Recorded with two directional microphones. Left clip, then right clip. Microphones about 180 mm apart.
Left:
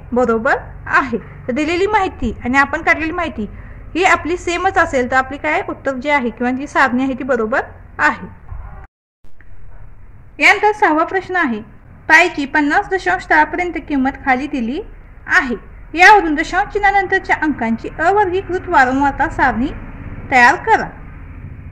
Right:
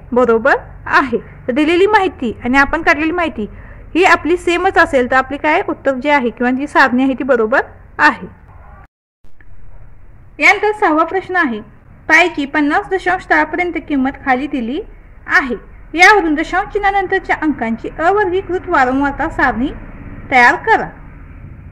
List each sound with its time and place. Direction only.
0.1 s a woman's voice: 40° right (ahead or behind)
10.3 s a woman's voice: 15° right (ahead or behind)